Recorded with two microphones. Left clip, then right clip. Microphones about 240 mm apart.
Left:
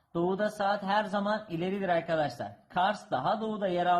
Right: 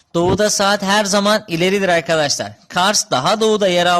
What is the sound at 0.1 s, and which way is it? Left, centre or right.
Speech, right.